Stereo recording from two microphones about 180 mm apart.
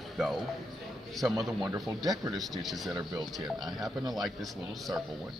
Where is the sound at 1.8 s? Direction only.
Centre (ahead or behind).